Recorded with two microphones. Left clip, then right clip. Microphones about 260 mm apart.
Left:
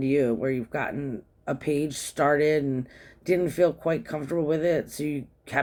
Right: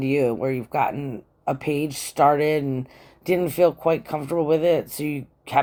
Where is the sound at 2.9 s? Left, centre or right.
Left.